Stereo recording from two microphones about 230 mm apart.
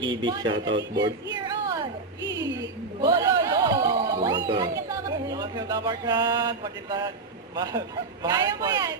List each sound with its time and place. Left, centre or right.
0.0 s speech: centre
1.5 s a sound: centre
2.4 s chatter: centre
7.5 s speech: centre